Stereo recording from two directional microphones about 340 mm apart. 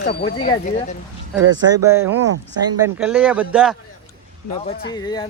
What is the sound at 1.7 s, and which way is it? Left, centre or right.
Speech, centre.